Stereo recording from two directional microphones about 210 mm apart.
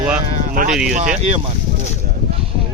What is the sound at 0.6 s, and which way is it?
Speech, 40° right (ahead or behind).